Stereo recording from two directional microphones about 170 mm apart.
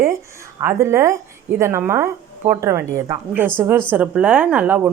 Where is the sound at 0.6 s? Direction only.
15° right (ahead or behind).